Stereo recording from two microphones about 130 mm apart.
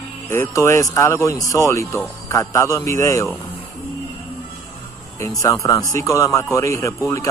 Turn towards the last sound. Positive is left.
turn(degrees=25)  # may be behind; listen again after turning